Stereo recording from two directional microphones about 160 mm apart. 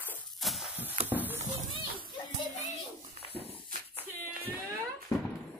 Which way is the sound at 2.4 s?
50° left (ahead or behind).